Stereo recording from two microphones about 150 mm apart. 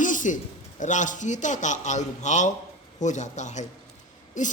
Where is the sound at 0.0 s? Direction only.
60° left (ahead or behind).